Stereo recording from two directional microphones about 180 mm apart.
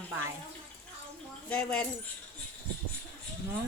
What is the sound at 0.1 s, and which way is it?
Speech, 15° right (ahead or behind).